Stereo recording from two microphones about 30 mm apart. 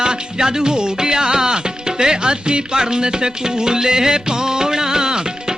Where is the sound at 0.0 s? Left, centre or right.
Right.